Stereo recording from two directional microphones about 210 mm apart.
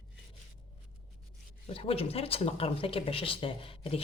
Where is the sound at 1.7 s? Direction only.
25° left (ahead or behind).